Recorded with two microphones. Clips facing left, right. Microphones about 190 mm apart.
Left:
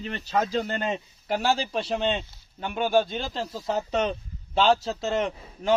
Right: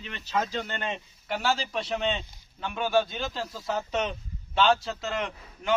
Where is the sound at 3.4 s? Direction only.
30° left (ahead or behind).